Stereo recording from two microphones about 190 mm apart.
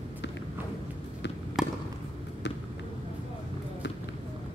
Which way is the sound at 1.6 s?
Centre (ahead or behind).